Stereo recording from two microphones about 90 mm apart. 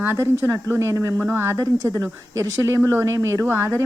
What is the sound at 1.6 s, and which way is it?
Speech, 40° right (ahead or behind).